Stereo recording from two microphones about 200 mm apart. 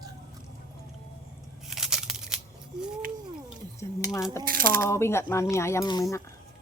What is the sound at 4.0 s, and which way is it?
Coin, 15° left (ahead or behind).